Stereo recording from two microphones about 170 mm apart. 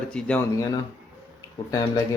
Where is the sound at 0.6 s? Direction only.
20° left (ahead or behind).